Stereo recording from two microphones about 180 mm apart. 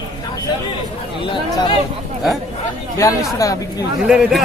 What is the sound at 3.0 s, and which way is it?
Speech, 15° left (ahead or behind).